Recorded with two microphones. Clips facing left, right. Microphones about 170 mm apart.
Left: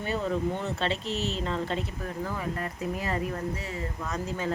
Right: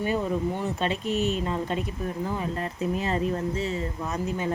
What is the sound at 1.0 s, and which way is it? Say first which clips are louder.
Speech: right 5 dB; 55° right (ahead or behind).